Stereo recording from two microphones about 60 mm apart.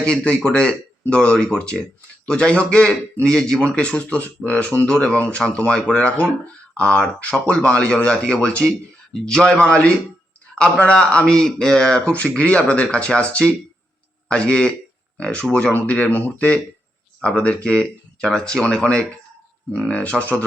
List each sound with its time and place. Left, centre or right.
0.0 s a man's voice: centre